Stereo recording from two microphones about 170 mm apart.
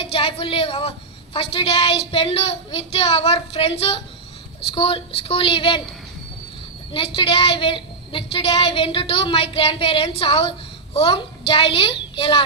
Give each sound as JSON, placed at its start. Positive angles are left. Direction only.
{"t": 0.0, "sound": "a woman's voice", "side_deg": 35}
{"t": 6.9, "sound": "a woman's voice", "side_deg": 35}